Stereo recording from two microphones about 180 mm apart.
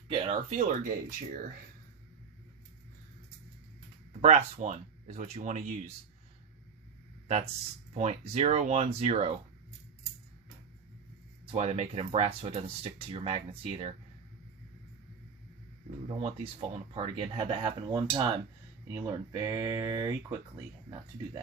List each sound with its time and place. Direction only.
0.1 s speech: 35° right (ahead or behind)
4.2 s speech: 40° right (ahead or behind)
7.9 s speech: 35° right (ahead or behind)
11.5 s speech: 35° right (ahead or behind)
16.0 s speech: 35° right (ahead or behind); by 20.1 s 20° right (ahead or behind)